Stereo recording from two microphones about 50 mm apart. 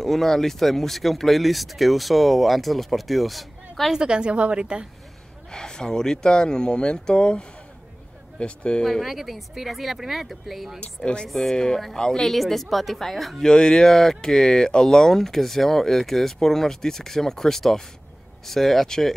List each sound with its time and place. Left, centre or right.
0.0 s speech: centre
3.9 s a woman's voice: centre
5.5 s speech: centre
9.0 s speech: centre
11.0 s speech: centre
13.5 s speech: centre